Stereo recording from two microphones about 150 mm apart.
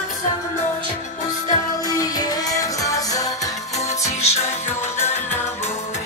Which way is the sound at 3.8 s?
50° left (ahead or behind).